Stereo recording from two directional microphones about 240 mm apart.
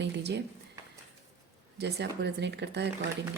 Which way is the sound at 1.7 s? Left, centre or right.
Right.